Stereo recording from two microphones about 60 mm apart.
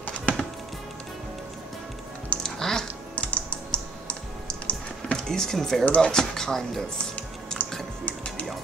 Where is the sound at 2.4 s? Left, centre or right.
Centre.